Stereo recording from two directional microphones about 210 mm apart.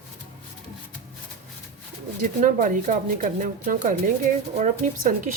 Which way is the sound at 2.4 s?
40° right (ahead or behind).